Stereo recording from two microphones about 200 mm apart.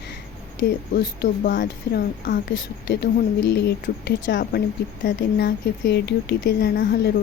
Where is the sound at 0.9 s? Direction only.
50° left (ahead or behind).